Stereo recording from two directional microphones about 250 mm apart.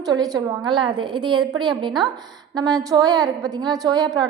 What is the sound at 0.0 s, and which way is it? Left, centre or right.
A woman's voice, centre.